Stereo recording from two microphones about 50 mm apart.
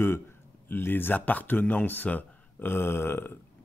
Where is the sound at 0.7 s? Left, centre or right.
Left.